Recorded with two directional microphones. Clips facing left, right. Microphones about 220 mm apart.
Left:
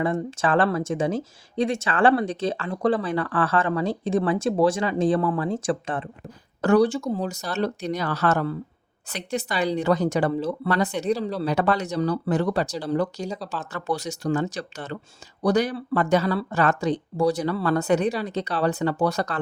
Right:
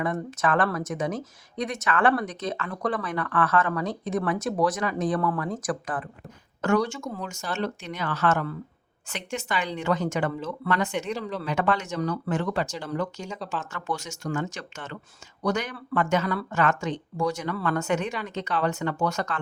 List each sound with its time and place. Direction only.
0.0 s speech: 30° left (ahead or behind)